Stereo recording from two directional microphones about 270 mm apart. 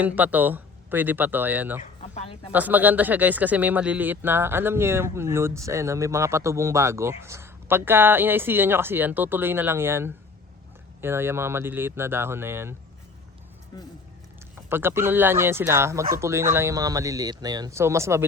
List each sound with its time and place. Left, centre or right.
0.0 s speech: centre
2.1 s speech: left
2.5 s speech: centre
13.7 s speech: centre
14.5 s speech: centre